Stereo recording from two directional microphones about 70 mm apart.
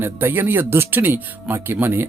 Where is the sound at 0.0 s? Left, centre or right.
Right.